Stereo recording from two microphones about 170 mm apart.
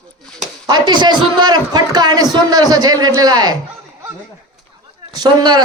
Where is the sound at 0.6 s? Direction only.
25° right (ahead or behind).